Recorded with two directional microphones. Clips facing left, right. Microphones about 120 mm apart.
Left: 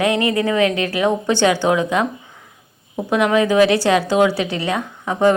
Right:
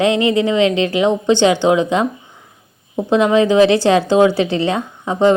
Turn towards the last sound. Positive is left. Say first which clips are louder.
# right 2 dB
turn(degrees=-25)  # may be behind; listen again after turning